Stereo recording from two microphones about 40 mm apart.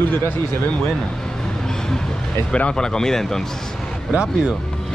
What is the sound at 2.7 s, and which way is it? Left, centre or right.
Speech, centre.